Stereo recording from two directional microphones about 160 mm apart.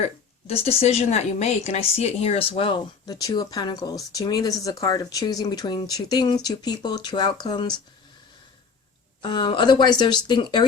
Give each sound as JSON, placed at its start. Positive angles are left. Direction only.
{"t": 0.0, "sound": "a woman's voice", "side_deg": 40}
{"t": 9.2, "sound": "speech", "side_deg": 30}